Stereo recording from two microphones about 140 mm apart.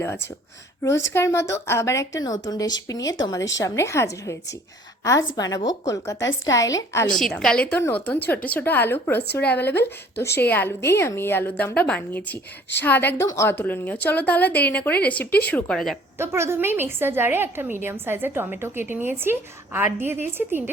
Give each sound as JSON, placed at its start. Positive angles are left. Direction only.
{"t": 0.8, "sound": "a woman's voice", "side_deg": 20}
{"t": 5.4, "sound": "a woman's voice", "side_deg": 25}
{"t": 7.2, "sound": "a woman's voice", "side_deg": 5}
{"t": 16.1, "sound": "a woman's voice", "side_deg": -20}